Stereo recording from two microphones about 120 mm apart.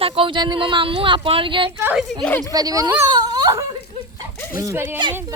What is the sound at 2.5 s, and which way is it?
Speech, 30° right (ahead or behind).